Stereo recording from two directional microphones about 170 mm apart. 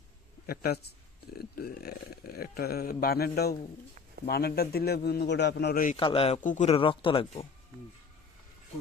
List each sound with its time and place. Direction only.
0.4 s a man's voice: 65° left (ahead or behind)
6.0 s speech: 30° left (ahead or behind)
6.4 s speech: 45° left (ahead or behind)